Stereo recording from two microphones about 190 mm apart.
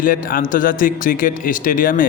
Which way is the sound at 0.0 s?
45° left (ahead or behind).